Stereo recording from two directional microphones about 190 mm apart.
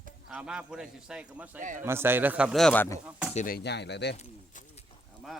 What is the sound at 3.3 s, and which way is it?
Dishes, 35° left (ahead or behind).